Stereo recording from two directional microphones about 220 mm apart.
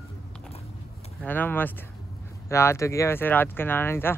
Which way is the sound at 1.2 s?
10° left (ahead or behind).